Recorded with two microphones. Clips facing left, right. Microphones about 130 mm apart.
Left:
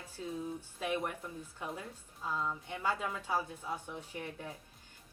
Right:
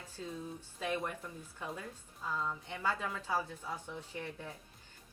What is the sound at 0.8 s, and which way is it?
Speech, 20° left (ahead or behind).